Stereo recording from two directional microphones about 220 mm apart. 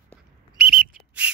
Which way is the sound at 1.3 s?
5° right (ahead or behind).